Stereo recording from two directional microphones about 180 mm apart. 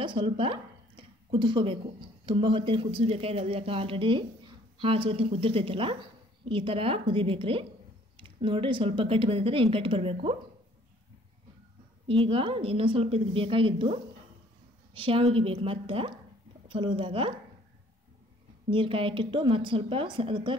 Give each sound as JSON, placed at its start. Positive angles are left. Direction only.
{"t": 0.0, "sound": "speech", "side_deg": -30}
{"t": 12.1, "sound": "a woman's voice", "side_deg": -30}
{"t": 18.7, "sound": "speech", "side_deg": -30}